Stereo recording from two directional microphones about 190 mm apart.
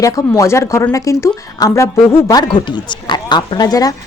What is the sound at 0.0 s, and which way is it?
A woman's voice, 15° left (ahead or behind).